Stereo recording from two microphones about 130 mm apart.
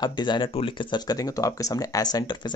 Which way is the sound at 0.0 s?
35° left (ahead or behind).